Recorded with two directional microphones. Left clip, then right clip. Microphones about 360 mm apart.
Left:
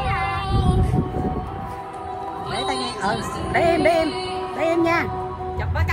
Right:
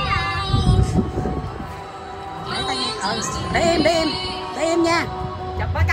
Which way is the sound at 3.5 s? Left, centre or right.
Centre.